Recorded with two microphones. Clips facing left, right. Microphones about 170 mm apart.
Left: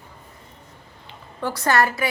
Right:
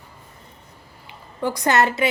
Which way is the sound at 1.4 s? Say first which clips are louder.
Right 1 dB; 15° right (ahead or behind).